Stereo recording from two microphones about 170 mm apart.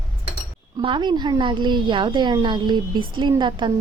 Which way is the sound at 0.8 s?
30° right (ahead or behind).